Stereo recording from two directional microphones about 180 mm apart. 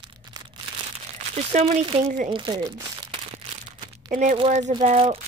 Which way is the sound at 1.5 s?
35° right (ahead or behind).